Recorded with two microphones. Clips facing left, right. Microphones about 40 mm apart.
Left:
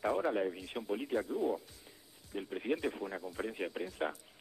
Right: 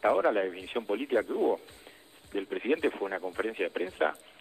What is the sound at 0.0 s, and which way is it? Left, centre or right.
Speech, right.